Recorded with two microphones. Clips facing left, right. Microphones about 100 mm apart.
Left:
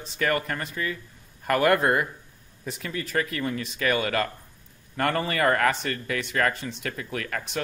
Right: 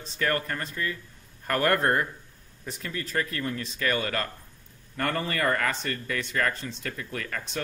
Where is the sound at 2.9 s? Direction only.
75° left (ahead or behind).